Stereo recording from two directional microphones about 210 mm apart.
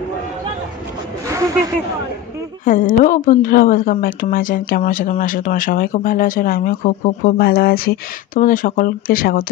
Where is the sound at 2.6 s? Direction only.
40° left (ahead or behind).